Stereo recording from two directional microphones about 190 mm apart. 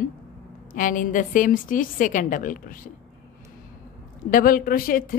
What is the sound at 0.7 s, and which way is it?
A woman's voice, 45° left (ahead or behind).